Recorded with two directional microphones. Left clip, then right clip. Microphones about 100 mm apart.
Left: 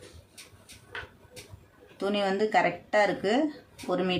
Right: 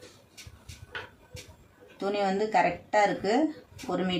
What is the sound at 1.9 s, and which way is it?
Speech, 80° left.